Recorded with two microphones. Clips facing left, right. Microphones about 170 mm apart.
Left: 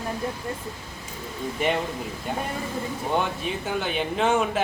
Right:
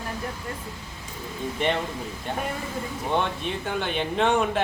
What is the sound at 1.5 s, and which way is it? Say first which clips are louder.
Speech: left 1 dB; 5° left (ahead or behind).